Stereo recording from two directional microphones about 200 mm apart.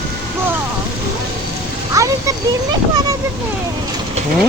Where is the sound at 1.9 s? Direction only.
15° right (ahead or behind).